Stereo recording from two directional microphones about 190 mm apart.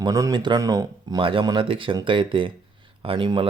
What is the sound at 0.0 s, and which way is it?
Speech, 20° right (ahead or behind).